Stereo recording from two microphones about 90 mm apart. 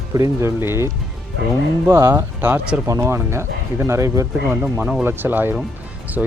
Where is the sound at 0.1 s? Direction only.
35° right (ahead or behind).